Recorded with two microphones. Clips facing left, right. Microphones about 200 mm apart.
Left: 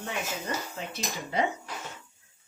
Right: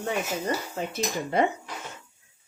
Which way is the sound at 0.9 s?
50° right (ahead or behind).